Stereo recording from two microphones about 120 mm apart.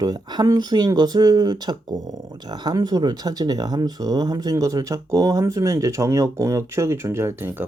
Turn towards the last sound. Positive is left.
turn(degrees=-20)  # may be behind; listen again after turning